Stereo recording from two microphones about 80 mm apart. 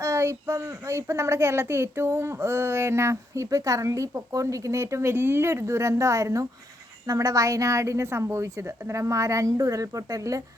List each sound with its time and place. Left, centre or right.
0.0 s a child's voice: right